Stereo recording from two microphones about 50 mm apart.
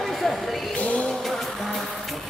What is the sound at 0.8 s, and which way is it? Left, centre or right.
Vehicle, left.